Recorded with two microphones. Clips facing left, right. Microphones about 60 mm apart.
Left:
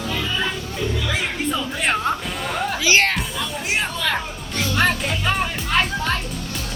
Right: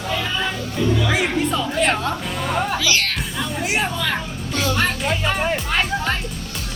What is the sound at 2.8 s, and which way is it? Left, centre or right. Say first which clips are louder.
Speech: left 4 dB; left.